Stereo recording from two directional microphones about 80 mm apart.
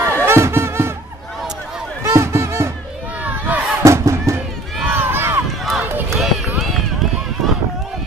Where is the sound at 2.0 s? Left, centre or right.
Right.